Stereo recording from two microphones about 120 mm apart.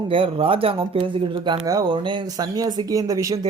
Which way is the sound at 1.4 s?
35° right (ahead or behind).